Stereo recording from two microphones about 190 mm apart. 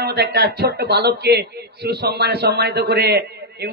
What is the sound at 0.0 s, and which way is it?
Speech, 55° right (ahead or behind).